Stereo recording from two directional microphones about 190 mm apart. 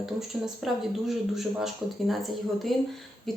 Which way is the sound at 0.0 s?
Centre (ahead or behind).